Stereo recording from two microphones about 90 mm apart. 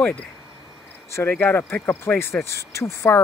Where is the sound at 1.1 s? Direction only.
30° left (ahead or behind).